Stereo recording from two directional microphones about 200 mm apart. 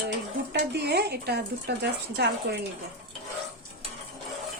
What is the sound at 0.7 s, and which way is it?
Speech, 55° right (ahead or behind).